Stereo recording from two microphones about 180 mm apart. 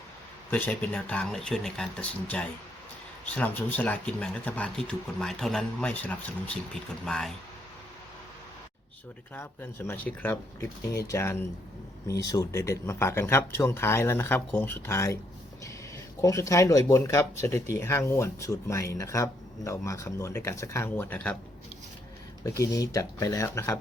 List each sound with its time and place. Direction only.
0.5 s speech: 10° left (ahead or behind)
9.3 s speech: 10° left (ahead or behind)
16.2 s speech: 15° left (ahead or behind)
22.4 s speech: 15° left (ahead or behind)